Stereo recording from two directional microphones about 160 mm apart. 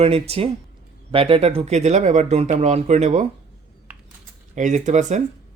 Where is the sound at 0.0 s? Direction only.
35° right (ahead or behind).